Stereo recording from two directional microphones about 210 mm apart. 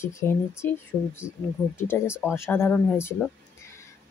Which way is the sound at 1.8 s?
10° left (ahead or behind).